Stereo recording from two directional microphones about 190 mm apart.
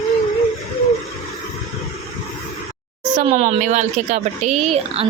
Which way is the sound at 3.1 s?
35° right (ahead or behind).